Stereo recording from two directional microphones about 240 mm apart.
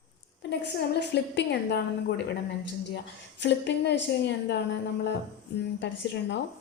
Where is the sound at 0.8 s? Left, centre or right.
Left.